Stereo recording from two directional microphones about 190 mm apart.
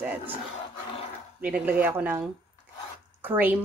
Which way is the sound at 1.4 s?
5° right (ahead or behind).